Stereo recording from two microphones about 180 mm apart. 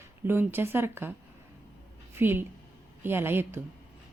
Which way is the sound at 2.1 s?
10° right (ahead or behind).